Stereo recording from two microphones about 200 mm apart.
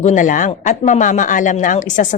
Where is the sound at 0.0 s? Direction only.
40° left (ahead or behind).